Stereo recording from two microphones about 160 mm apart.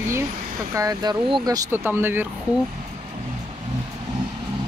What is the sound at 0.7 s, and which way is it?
Speech, 20° right (ahead or behind).